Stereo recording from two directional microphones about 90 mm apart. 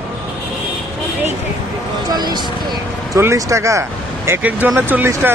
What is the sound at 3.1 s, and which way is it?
Speech, 30° right (ahead or behind).